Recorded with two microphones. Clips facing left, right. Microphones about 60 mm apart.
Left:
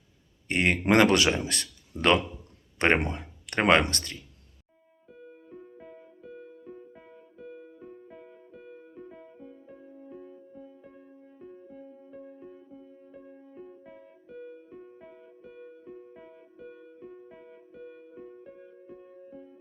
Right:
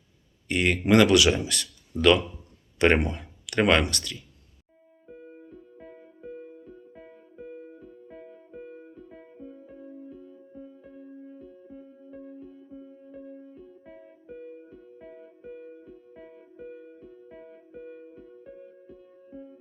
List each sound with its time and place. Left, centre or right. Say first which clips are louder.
0.4 s a man's voice: even; left
10.1 s music: even; left
11.3 s music: right 1 dB; left